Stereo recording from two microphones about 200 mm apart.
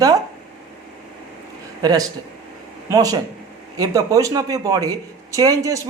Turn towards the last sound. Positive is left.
turn(degrees=-15)  # may be behind; listen again after turning